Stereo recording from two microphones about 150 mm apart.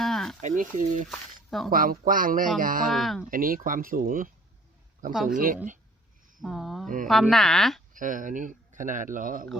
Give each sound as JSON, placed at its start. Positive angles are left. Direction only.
{"t": 0.0, "sound": "a sound", "side_deg": 0}
{"t": 0.4, "sound": "speech", "side_deg": -60}
{"t": 1.0, "sound": "speech", "side_deg": 0}
{"t": 1.7, "sound": "speech", "side_deg": -70}
{"t": 2.9, "sound": "speech", "side_deg": 0}
{"t": 3.2, "sound": "speech", "side_deg": -65}
{"t": 5.3, "sound": "speech", "side_deg": -65}
{"t": 6.4, "sound": "speech", "side_deg": 0}
{"t": 7.9, "sound": "speech", "side_deg": -60}